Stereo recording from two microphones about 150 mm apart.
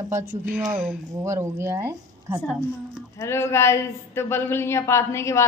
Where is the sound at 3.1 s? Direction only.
20° left (ahead or behind).